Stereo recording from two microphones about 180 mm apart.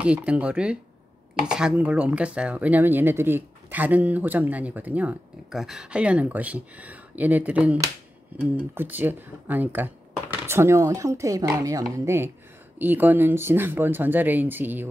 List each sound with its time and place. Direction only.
0.0 s speech: 5° right (ahead or behind)